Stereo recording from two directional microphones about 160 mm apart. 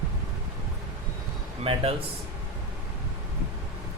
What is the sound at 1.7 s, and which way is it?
Speech, 35° right (ahead or behind).